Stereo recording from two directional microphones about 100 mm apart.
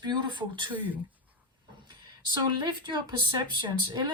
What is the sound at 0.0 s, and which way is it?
Speech, 50° right (ahead or behind).